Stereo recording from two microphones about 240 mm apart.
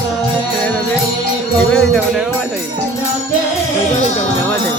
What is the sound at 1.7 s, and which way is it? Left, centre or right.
Speech, centre.